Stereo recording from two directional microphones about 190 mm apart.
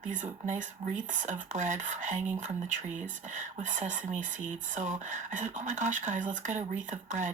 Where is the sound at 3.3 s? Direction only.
40° right (ahead or behind).